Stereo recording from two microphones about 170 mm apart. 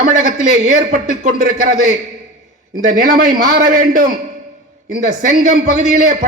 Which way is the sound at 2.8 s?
50° right (ahead or behind).